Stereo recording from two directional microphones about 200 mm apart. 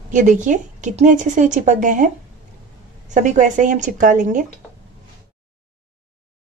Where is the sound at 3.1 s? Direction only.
40° right (ahead or behind).